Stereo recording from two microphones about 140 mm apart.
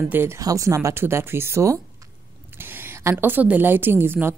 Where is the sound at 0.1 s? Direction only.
15° right (ahead or behind).